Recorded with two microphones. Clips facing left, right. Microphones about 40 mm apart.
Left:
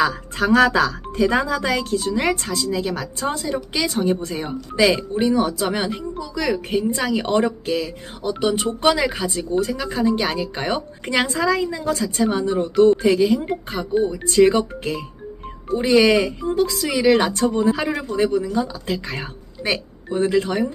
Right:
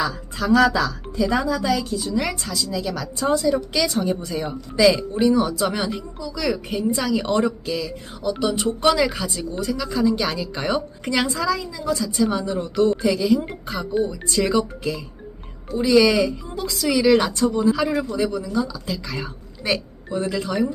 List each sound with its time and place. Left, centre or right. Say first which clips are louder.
0.0 s speech: left 5 dB; left
5.1 s a woman's voice: even; centre
11.3 s speech: left 3 dB; left
14.3 s speech: left 9 dB; left
16.8 s speech: right 2 dB; left
17.3 s speech: even; left